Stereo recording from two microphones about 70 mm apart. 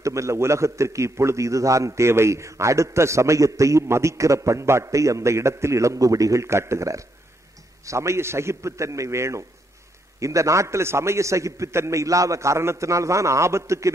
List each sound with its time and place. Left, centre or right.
0.0 s a man's voice: right